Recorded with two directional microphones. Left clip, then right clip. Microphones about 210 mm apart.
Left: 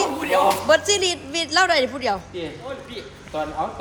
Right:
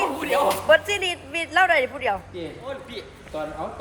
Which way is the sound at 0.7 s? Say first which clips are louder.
Left 1 dB; 30° left (ahead or behind).